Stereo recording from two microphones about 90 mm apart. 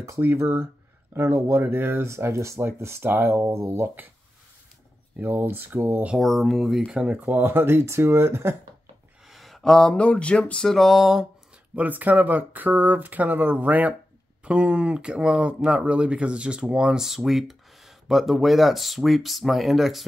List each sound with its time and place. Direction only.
0.0 s speech: 30° right (ahead or behind)
5.1 s speech: 20° right (ahead or behind)
6.1 s speech: centre (ahead or behind)
7.0 s speech: 15° right (ahead or behind)
9.2 s a sound: centre (ahead or behind)
11.7 s speech: 20° right (ahead or behind); by 20.1 s centre (ahead or behind)